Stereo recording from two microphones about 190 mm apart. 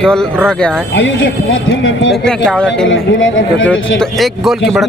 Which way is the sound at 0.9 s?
85° left.